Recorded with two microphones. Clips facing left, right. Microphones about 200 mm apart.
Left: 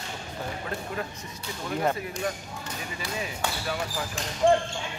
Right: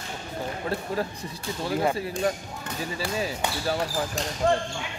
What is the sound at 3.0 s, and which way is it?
Speech, 30° right (ahead or behind).